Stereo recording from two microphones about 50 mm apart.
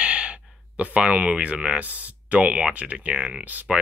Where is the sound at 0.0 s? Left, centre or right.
Right.